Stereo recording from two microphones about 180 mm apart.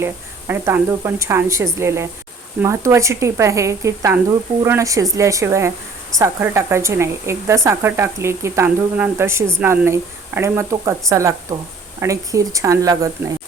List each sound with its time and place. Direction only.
0.0 s a woman's voice: 15° right (ahead or behind)